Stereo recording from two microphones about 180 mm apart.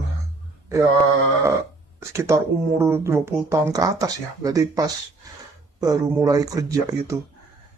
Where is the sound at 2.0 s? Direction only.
15° right (ahead or behind).